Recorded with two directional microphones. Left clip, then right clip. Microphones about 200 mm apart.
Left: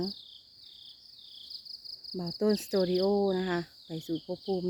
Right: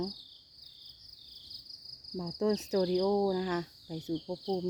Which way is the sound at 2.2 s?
Centre (ahead or behind).